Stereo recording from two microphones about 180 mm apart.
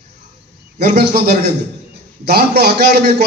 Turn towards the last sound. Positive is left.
turn(degrees=-65)  # may be behind; listen again after turning